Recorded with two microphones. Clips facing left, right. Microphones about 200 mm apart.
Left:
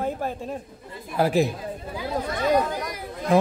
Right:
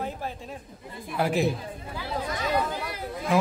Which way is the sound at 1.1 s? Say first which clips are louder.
Left 5 dB; 35° left (ahead or behind).